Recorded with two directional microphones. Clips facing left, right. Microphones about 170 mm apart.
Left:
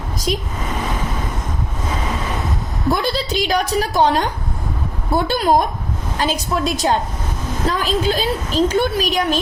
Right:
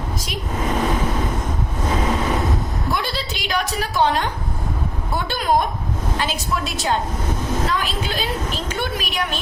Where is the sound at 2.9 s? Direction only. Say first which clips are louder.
Left 8 dB; 40° left (ahead or behind).